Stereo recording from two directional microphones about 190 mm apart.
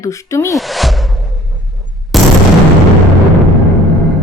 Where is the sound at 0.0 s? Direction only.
15° left (ahead or behind).